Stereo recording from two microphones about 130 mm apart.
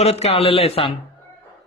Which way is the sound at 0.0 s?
55° left (ahead or behind).